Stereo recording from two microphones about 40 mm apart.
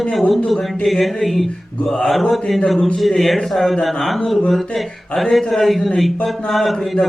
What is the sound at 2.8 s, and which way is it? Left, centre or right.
Speech, centre.